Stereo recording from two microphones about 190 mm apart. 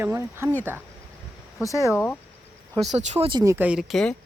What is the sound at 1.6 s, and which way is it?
Speech, 15° left (ahead or behind).